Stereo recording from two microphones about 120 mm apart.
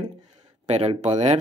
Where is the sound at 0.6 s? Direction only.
60° right (ahead or behind).